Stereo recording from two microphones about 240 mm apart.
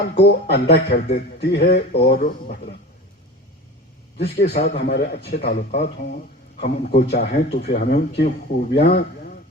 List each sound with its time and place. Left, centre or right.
0.2 s speech: left
4.2 s a man's voice: left